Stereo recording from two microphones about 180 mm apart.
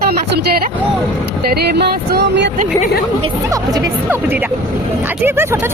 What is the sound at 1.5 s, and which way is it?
Speech, 65° right (ahead or behind).